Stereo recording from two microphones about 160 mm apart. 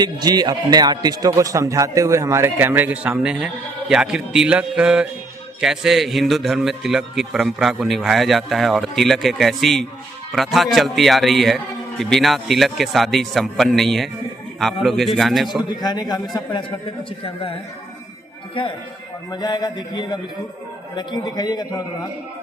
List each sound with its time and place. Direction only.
0.0 s a man's voice: 25° right (ahead or behind); by 15.4 s centre (ahead or behind)
15.7 s a man's voice: 25° left (ahead or behind)
19.3 s a man's voice: 25° left (ahead or behind)